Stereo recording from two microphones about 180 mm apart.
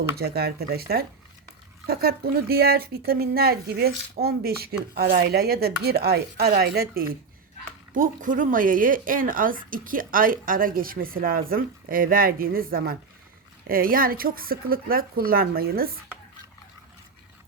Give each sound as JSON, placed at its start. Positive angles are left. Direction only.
{"t": 0.2, "sound": "a woman's voice", "side_deg": -60}